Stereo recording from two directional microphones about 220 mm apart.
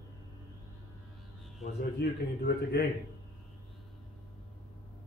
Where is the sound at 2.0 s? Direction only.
45° left (ahead or behind).